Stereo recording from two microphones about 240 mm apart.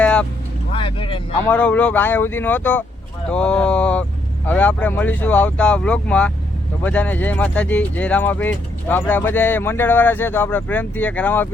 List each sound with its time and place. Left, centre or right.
0.0 s vehicle: centre
0.7 s vehicle: left
1.5 s speech: centre